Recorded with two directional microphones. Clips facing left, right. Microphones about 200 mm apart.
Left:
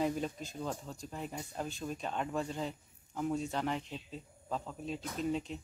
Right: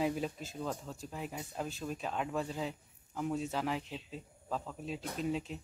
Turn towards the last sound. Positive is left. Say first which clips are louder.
# left 1 dB
turn(degrees=0)  # may be behind; listen again after turning